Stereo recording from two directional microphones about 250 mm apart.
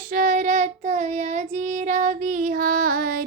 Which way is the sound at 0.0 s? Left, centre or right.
Right.